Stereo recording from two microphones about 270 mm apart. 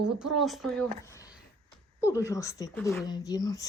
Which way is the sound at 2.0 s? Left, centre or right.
Centre.